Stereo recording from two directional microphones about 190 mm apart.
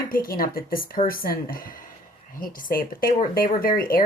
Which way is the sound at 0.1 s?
50° left (ahead or behind).